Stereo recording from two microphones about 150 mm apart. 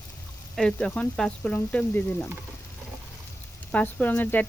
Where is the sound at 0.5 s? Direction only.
5° left (ahead or behind).